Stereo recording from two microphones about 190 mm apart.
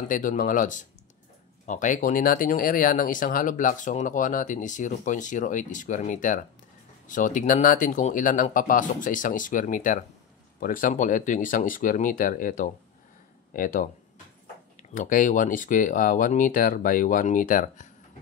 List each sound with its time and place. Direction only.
0.1 s speech: 45° left (ahead or behind)